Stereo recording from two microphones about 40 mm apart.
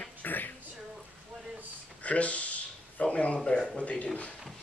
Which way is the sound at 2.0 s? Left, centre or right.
Left.